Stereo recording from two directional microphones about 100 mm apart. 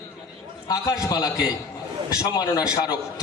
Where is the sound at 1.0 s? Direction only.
35° left (ahead or behind).